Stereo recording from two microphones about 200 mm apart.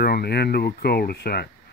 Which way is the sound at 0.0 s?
50° left (ahead or behind).